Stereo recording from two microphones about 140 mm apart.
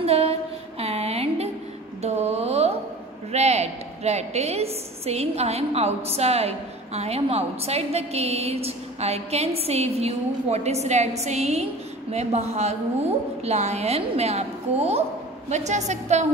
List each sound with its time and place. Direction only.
0.0 s music: 45° right (ahead or behind)
2.0 s mantra: 50° right (ahead or behind)
3.3 s a woman's voice: 50° right (ahead or behind)